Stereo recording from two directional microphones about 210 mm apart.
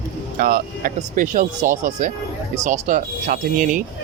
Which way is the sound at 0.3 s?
40° right (ahead or behind).